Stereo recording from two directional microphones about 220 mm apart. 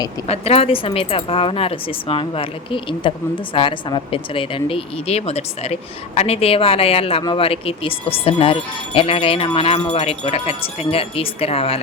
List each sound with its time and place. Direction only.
0.3 s speech: 25° left (ahead or behind)